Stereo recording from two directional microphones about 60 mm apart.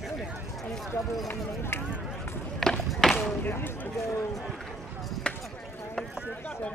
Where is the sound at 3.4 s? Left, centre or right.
Left.